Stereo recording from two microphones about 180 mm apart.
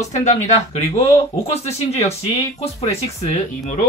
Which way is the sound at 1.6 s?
35° left (ahead or behind).